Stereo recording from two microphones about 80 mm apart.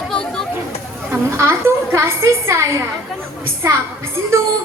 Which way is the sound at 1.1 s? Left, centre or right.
Right.